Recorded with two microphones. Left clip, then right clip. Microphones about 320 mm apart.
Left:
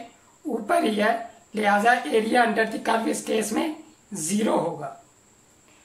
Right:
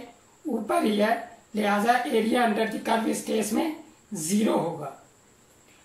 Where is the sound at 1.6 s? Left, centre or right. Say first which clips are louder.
Left 3 dB; left.